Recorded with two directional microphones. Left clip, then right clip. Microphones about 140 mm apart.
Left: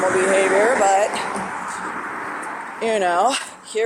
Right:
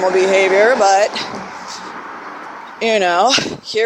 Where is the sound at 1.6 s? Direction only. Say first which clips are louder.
Left 2 dB; 25° right (ahead or behind).